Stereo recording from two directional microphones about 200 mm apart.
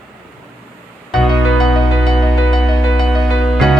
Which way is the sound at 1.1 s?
Centre (ahead or behind).